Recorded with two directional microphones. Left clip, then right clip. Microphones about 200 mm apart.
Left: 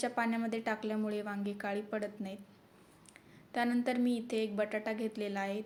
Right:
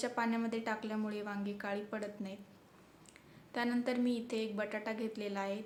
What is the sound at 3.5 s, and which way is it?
A woman's voice, 15° left (ahead or behind).